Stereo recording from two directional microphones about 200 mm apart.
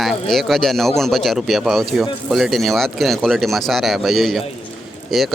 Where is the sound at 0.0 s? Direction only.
Centre (ahead or behind).